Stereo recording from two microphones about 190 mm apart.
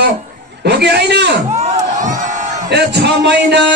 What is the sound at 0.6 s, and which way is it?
Speech, 60° right (ahead or behind).